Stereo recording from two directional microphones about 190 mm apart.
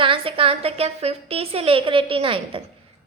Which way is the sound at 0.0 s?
30° right (ahead or behind).